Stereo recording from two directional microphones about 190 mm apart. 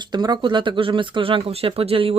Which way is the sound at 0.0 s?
25° right (ahead or behind).